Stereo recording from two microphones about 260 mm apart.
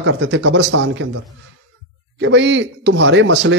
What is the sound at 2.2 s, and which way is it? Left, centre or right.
A man's voice, right.